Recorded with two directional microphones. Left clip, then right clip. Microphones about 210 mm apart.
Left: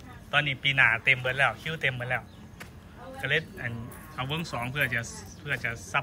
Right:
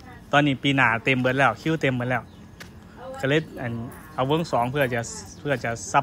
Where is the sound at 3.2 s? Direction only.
20° right (ahead or behind).